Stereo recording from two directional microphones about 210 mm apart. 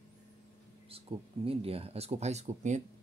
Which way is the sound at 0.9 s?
25° right (ahead or behind).